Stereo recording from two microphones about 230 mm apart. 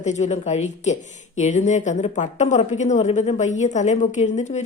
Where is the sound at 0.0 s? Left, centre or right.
Left.